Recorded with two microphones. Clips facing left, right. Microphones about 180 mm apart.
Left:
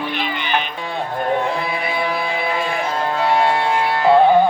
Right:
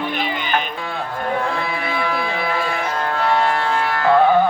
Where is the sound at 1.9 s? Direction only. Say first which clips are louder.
Even; 20° left (ahead or behind).